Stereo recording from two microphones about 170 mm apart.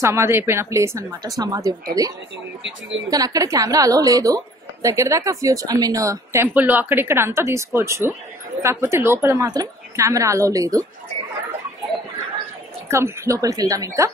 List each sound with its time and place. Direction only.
0.0 s a woman's voice: 15° right (ahead or behind)
12.8 s speech: 15° right (ahead or behind)